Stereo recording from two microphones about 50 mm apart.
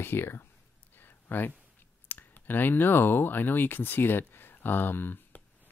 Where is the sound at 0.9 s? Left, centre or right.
Left.